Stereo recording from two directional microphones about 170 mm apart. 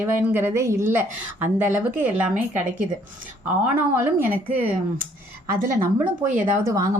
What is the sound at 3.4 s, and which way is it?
Speech, 10° right (ahead or behind).